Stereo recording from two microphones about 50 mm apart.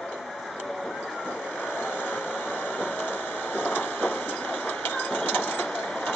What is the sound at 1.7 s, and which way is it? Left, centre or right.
Vehicle, left.